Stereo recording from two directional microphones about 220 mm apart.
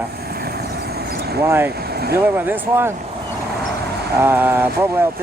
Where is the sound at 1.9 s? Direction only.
45° right (ahead or behind).